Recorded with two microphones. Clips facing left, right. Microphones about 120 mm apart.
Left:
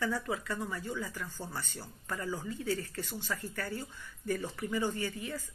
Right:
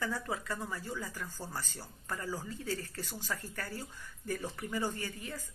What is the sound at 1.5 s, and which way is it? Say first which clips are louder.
Speech: left 1 dB; 35° right (ahead or behind).